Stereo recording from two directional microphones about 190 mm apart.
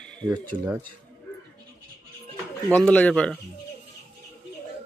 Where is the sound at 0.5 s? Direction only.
5° right (ahead or behind).